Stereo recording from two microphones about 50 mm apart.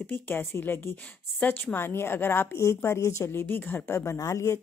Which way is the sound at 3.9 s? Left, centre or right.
Left.